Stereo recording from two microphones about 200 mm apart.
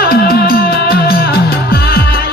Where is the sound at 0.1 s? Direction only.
50° left (ahead or behind).